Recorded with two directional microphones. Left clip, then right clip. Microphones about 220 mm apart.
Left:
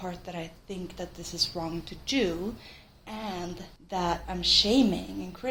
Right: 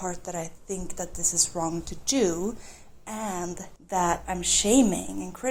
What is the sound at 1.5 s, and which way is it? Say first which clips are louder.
A woman's voice: right 5 dB; 30° right (ahead or behind).